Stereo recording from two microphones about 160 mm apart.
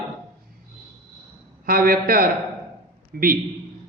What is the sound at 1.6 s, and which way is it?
A man's voice, 65° right (ahead or behind).